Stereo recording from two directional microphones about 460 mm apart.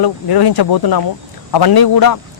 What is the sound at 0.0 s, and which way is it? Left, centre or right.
Speech, left.